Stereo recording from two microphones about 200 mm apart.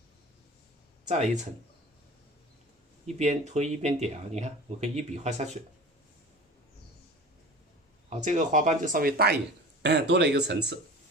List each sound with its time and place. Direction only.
1.0 s speech: 35° right (ahead or behind)
3.2 s speech: 35° right (ahead or behind)
8.2 s speech: 35° right (ahead or behind)
9.8 s speech: 60° right (ahead or behind)